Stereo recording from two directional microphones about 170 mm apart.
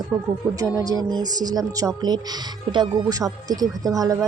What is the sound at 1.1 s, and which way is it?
Speech, 25° right (ahead or behind).